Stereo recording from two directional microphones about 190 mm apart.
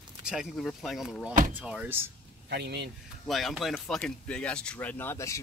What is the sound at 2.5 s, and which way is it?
Speech, 60° right (ahead or behind).